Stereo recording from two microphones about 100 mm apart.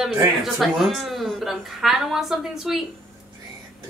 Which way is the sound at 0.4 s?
Centre (ahead or behind).